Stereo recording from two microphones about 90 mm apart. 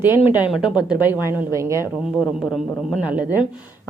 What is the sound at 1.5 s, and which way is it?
Speech, 30° right (ahead or behind).